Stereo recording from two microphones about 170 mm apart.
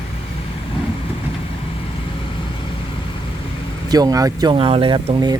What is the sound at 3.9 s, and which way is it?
Speech, 20° right (ahead or behind).